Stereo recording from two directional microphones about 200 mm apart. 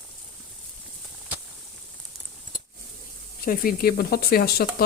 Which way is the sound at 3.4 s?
45° left (ahead or behind).